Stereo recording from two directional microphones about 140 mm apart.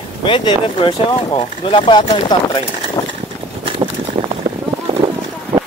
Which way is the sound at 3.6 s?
35° right (ahead or behind).